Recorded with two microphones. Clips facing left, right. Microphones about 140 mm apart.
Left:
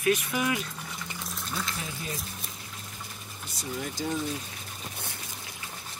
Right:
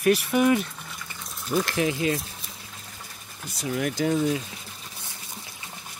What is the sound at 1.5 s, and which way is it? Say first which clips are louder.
Speech: right 13 dB; 80° right.